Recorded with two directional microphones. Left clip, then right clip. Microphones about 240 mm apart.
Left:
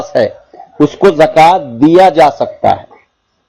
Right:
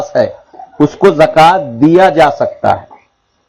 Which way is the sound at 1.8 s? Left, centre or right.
Centre.